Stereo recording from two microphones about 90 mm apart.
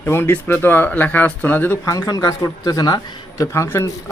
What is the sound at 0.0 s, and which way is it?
Speech, 25° left (ahead or behind).